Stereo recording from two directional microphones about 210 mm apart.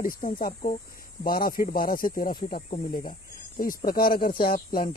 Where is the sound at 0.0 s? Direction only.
40° left (ahead or behind).